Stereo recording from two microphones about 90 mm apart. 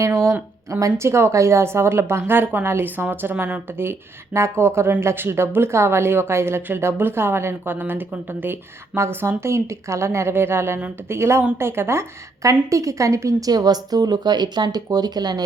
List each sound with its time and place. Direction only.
0.0 s speech: 30° right (ahead or behind); by 15.4 s 50° right (ahead or behind)